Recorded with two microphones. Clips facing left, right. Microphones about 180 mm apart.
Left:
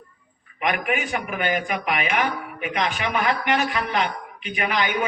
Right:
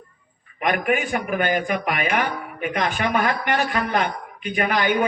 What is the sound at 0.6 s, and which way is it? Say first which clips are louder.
A man's voice: right 3 dB; 45° right (ahead or behind).